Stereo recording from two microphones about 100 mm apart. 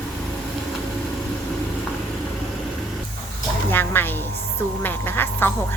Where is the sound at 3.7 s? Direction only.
20° left (ahead or behind).